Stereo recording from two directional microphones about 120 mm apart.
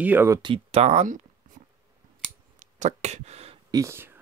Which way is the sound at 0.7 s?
65° right (ahead or behind).